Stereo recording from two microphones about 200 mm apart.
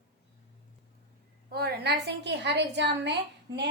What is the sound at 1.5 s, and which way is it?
A woman's voice, 50° right (ahead or behind).